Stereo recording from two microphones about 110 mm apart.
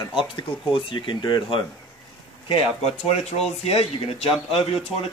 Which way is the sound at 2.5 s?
70° left (ahead or behind).